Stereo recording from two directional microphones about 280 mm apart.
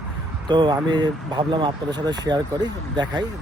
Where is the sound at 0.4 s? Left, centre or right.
Centre.